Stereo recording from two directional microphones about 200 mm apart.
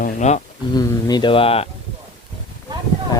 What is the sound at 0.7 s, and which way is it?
Speech, 20° left (ahead or behind).